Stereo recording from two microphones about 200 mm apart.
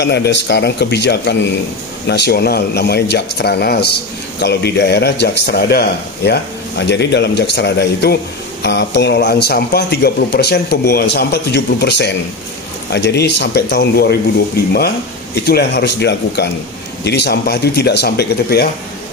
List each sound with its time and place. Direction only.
0.0 s speech: 55° left (ahead or behind)
15.4 s speech: 55° left (ahead or behind)